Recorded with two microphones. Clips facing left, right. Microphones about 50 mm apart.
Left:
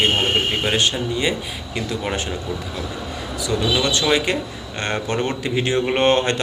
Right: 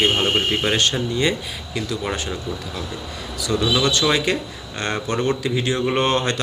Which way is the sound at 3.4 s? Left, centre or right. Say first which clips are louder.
Right 1 dB; left.